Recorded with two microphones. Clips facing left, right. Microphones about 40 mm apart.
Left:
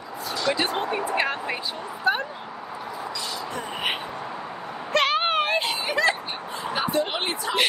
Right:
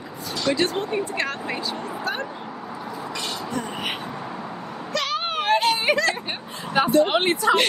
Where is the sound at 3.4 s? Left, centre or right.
Centre.